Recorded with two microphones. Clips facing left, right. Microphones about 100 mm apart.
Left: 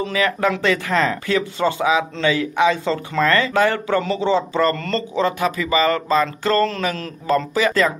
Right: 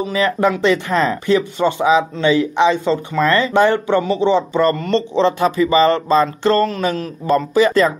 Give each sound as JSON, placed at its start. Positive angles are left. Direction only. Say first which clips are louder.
{"t": 0.0, "sound": "speech", "louder": "right 3 dB", "side_deg": -20}